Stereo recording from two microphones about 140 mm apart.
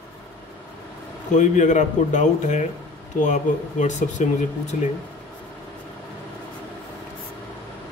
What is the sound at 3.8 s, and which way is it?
Speech, 60° left (ahead or behind).